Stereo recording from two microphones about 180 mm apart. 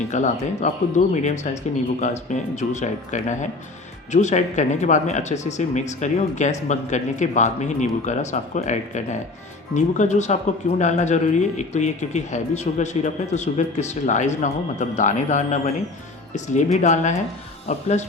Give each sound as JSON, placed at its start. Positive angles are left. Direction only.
{"t": 0.1, "sound": "speech", "side_deg": 40}